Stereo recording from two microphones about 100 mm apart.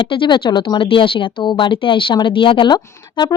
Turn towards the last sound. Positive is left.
turn(degrees=50)  # may be behind; listen again after turning